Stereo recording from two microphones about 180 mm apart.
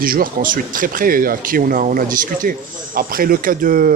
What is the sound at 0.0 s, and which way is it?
Speech, 50° right (ahead or behind).